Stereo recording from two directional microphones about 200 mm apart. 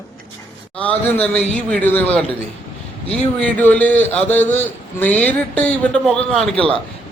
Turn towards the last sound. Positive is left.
turn(degrees=0)  # may be behind; listen again after turning